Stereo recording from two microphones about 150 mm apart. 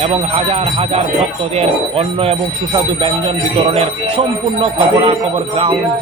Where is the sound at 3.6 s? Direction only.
40° right (ahead or behind).